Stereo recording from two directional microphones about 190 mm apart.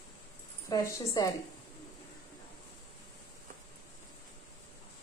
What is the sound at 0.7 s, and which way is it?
Speech, 20° left (ahead or behind).